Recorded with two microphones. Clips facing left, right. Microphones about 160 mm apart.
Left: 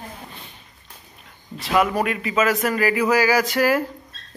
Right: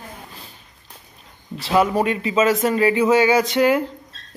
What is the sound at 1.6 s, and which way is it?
A man's voice, 30° right (ahead or behind).